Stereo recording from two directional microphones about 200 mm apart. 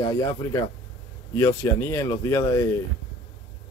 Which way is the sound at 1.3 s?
15° left (ahead or behind).